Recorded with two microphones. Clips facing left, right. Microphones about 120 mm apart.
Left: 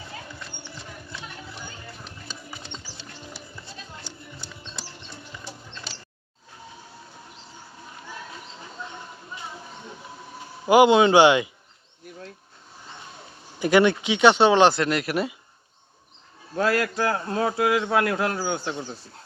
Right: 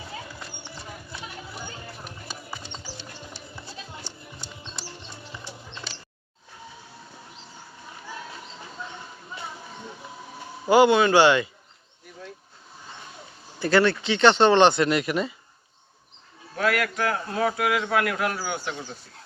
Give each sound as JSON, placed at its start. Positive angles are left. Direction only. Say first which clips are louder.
{"t": 10.7, "sound": "speech", "louder": "left 2 dB", "side_deg": 15}
{"t": 13.6, "sound": "speech", "louder": "left 2 dB", "side_deg": 15}
{"t": 16.6, "sound": "speech", "louder": "left 2 dB", "side_deg": 30}